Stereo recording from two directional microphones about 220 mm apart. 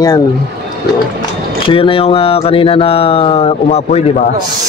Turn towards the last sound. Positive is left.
turn(degrees=30)  # may be behind; listen again after turning